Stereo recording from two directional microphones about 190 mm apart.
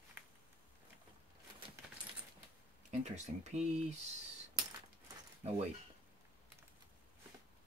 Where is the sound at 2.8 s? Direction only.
40° right (ahead or behind).